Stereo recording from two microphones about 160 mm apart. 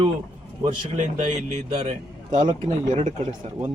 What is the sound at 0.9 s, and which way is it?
Speech, 50° right (ahead or behind).